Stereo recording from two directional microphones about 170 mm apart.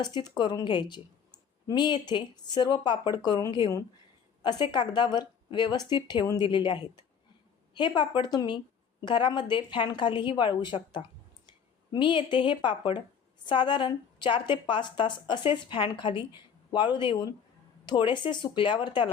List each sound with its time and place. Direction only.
0.0 s speech: 25° left (ahead or behind)